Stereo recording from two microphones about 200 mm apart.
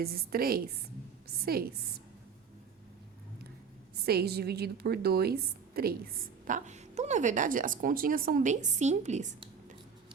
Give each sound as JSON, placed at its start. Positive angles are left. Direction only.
{"t": 0.0, "sound": "a woman's voice", "side_deg": -50}
{"t": 3.9, "sound": "a woman's voice", "side_deg": -55}